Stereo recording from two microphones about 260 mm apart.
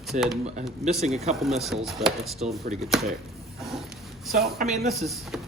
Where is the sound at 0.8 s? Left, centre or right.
Right.